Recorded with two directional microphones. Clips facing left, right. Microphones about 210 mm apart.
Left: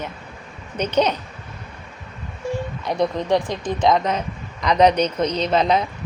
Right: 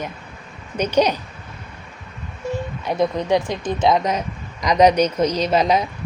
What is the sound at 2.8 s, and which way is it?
Speech, 5° right (ahead or behind).